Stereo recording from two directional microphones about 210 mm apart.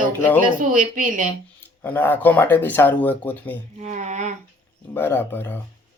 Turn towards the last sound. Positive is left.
turn(degrees=10)  # may be behind; listen again after turning